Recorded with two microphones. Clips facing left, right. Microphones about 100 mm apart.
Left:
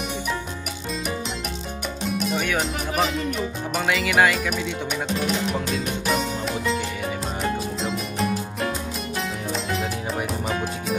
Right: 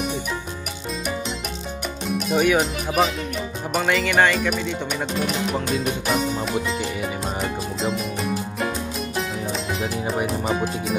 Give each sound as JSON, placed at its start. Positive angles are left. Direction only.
{"t": 2.0, "sound": "speech", "side_deg": -5}
{"t": 3.7, "sound": "music", "side_deg": 0}
{"t": 6.0, "sound": "music", "side_deg": 0}
{"t": 7.8, "sound": "music", "side_deg": 0}